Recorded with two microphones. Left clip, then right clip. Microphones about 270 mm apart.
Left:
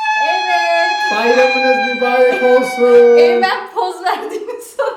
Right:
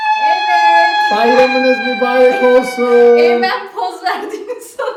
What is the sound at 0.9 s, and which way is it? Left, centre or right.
A woman's voice, centre.